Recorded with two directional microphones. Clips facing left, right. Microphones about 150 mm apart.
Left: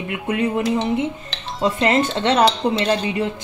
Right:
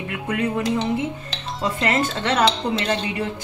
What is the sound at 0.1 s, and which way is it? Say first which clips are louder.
Speech: left 3 dB; 20° left (ahead or behind).